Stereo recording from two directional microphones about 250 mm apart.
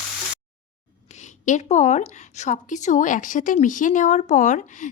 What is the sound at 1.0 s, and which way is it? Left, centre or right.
Speech, left.